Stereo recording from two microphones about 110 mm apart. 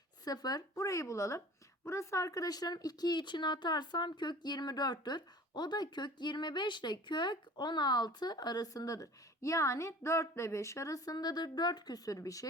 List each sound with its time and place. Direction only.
0.3 s speech: 35° left (ahead or behind)